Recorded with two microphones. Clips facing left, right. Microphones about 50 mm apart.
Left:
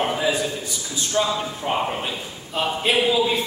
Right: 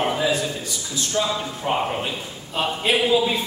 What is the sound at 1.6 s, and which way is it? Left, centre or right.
Speech, centre.